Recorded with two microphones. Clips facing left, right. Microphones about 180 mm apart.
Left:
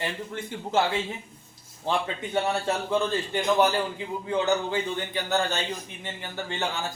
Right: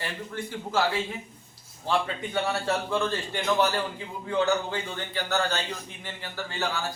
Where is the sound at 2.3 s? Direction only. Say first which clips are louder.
Left 1 dB; 20° left (ahead or behind).